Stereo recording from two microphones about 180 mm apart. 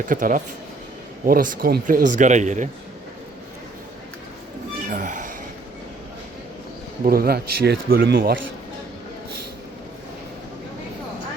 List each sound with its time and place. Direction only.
0.1 s speech: 50° right (ahead or behind)
4.9 s a sound: 45° right (ahead or behind)
7.0 s speech: 55° right (ahead or behind)